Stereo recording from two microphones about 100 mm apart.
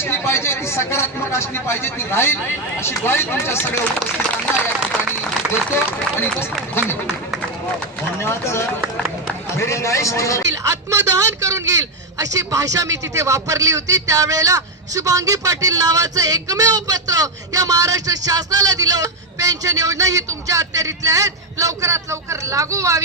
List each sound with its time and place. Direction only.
0.0 s speech: 25° left (ahead or behind)
6.1 s speech: 20° left (ahead or behind)
8.2 s speech: 25° left (ahead or behind)
10.5 s speech: 30° right (ahead or behind)